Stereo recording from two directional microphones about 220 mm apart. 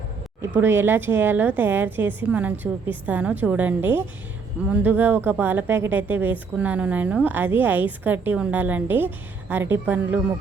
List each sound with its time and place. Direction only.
0.5 s speech: 10° right (ahead or behind)